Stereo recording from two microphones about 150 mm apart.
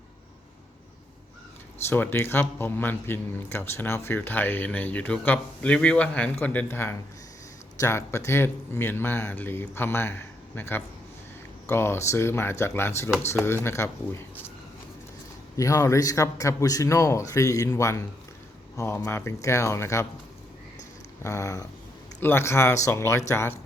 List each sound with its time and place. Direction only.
1.9 s speech: 15° left (ahead or behind)
15.5 s speech: 20° left (ahead or behind)
21.2 s speech: 20° left (ahead or behind)